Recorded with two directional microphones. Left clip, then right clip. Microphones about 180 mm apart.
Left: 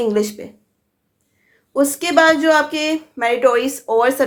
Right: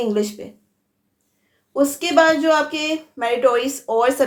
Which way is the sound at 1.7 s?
35° left (ahead or behind).